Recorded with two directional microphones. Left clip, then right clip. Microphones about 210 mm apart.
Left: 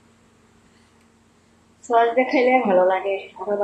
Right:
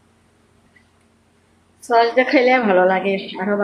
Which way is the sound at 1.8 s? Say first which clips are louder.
Right 3 dB; 35° right (ahead or behind).